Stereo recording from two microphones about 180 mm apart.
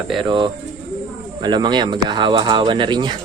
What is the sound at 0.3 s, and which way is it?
Speech, 25° right (ahead or behind).